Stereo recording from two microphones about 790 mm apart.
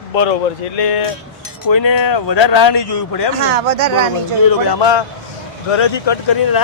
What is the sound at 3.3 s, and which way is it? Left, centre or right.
Speech, right.